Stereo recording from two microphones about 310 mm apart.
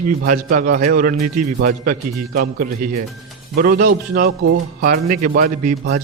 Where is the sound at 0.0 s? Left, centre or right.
Right.